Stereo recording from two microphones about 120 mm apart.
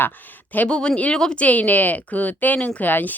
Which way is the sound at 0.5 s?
10° left (ahead or behind).